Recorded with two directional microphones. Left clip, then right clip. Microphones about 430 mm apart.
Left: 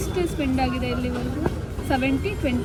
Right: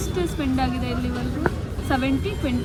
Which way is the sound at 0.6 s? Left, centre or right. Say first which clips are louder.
Left 1 dB; right.